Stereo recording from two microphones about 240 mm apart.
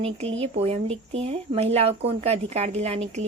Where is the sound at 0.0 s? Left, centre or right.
Right.